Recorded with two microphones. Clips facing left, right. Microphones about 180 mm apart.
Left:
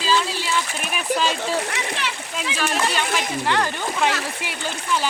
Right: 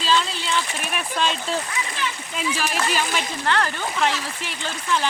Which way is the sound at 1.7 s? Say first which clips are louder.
Left 1 dB; 80° left.